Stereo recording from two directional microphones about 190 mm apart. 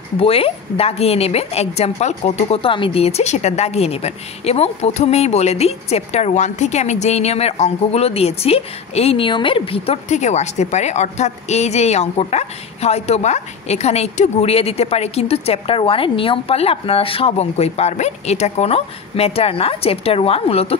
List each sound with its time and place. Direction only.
0.2 s a woman's voice: 30° left (ahead or behind)